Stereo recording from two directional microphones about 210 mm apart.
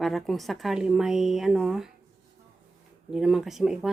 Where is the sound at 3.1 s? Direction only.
Centre (ahead or behind).